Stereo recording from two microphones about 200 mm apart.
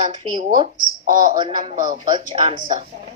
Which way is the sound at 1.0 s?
40° right (ahead or behind).